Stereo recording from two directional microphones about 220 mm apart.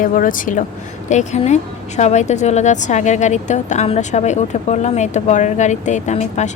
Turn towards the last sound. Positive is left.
turn(degrees=30)  # may be behind; listen again after turning